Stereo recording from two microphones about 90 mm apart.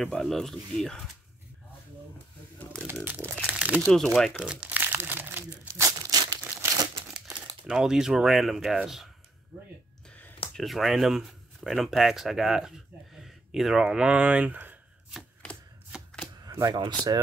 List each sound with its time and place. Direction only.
0.0 s speech: 5° left (ahead or behind)
2.9 s crumpling: 20° right (ahead or behind)
3.8 s speech: 5° left (ahead or behind)
4.4 s crumpling: 10° right (ahead or behind)
5.9 s crumpling: 45° right (ahead or behind)
7.6 s speech: 5° right (ahead or behind)
10.0 s a sound: 15° left (ahead or behind)
10.5 s speech: centre (ahead or behind); by 15.1 s 20° right (ahead or behind)
16.4 s speech: 45° right (ahead or behind)